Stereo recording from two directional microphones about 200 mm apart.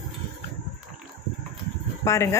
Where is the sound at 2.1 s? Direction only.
15° left (ahead or behind).